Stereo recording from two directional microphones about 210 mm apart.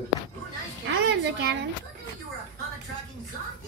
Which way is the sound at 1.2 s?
55° right (ahead or behind).